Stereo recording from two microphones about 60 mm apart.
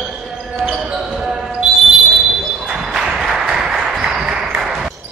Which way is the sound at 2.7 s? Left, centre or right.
Centre.